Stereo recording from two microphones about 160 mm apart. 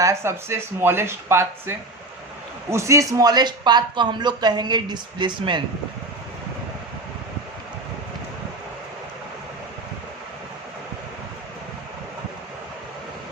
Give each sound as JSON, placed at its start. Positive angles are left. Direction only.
{"t": 0.0, "sound": "speech", "side_deg": -15}